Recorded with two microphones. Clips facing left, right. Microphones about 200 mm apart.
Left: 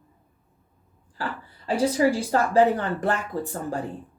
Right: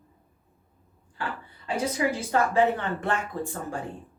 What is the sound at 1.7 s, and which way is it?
Speech, 35° left (ahead or behind).